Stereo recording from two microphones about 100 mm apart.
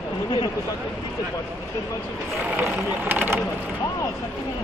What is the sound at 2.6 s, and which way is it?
Speech, 20° right (ahead or behind).